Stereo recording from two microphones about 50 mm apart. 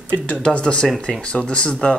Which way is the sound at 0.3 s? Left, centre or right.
Centre.